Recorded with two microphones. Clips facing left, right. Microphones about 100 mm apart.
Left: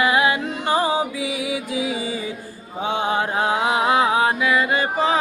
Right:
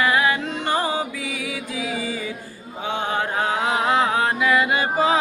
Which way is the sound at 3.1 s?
15° left (ahead or behind).